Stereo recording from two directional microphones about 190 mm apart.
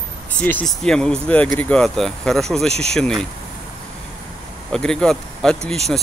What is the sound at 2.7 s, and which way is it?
Speech, 35° right (ahead or behind).